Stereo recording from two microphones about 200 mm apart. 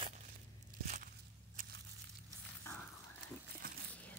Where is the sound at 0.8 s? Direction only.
40° right (ahead or behind).